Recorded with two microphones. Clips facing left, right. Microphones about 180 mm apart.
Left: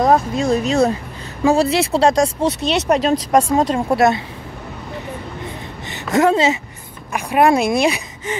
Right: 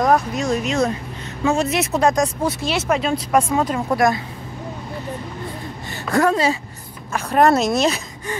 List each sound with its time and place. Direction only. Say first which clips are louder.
0.0 s a woman's voice: left 3 dB; 30° left (ahead or behind)
5.9 s a woman's voice: left 3 dB; 20° left (ahead or behind)
7.1 s speech: left 1 dB; 15° left (ahead or behind)